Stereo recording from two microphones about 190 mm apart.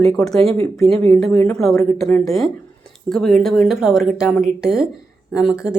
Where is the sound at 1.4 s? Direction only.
Centre (ahead or behind).